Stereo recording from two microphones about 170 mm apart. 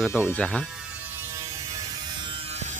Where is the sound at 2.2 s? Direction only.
35° right (ahead or behind).